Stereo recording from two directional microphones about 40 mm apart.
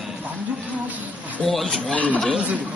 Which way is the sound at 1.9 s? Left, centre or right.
Left.